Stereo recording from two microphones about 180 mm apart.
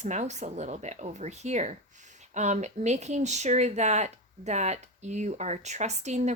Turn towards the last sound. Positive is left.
turn(degrees=-40)  # may be behind; listen again after turning